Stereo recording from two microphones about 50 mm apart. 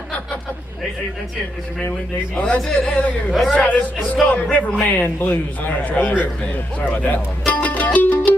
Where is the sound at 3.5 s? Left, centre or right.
Left.